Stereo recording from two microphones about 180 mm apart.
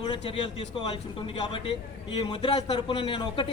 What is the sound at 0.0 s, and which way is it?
A man's voice, 25° left (ahead or behind).